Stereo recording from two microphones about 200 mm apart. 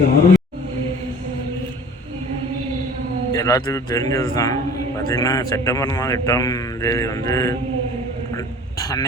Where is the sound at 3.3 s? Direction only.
15° left (ahead or behind).